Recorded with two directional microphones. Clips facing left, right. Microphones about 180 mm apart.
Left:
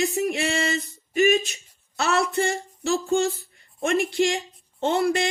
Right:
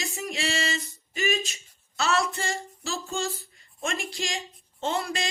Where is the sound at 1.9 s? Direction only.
60° left (ahead or behind).